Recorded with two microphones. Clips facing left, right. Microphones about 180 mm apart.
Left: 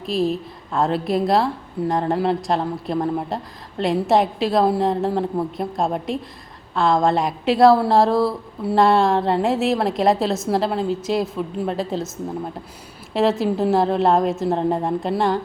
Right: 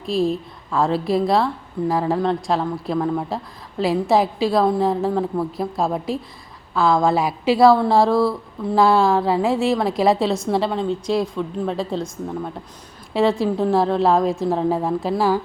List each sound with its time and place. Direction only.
0.0 s a woman's voice: centre (ahead or behind)
13.4 s a woman's voice: centre (ahead or behind)